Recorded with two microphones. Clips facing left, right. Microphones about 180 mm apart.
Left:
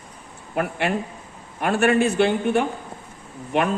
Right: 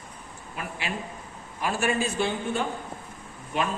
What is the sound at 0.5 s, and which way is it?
A man's voice, 60° left (ahead or behind).